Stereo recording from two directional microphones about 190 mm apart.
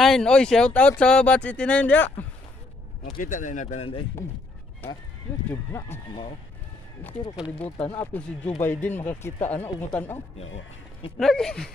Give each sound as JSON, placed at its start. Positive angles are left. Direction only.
{"t": 0.0, "sound": "speech", "side_deg": 0}
{"t": 3.2, "sound": "speech", "side_deg": 45}
{"t": 5.5, "sound": "speech", "side_deg": 10}
{"t": 7.0, "sound": "speech", "side_deg": 10}